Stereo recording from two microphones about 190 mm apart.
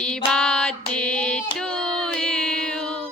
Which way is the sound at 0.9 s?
5° left (ahead or behind).